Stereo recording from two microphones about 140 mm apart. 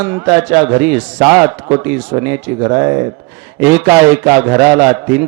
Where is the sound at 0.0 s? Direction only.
10° right (ahead or behind).